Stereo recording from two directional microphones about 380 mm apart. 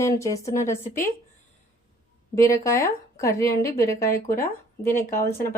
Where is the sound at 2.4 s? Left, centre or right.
Centre.